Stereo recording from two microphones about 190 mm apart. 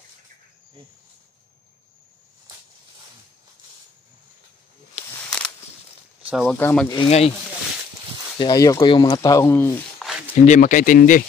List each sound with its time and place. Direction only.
5.1 s a sound: 5° left (ahead or behind)
6.3 s speech: 5° left (ahead or behind)
7.1 s speech: 35° left (ahead or behind)
8.4 s speech: 20° left (ahead or behind)
9.9 s a sound: centre (ahead or behind)
10.3 s speech: 40° left (ahead or behind)